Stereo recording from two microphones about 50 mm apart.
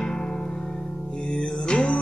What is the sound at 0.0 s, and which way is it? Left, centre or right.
Music, centre.